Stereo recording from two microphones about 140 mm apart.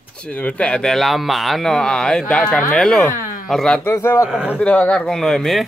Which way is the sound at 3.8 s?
20° left (ahead or behind).